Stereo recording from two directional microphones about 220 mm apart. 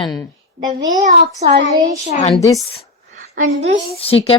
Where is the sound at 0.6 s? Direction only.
15° right (ahead or behind).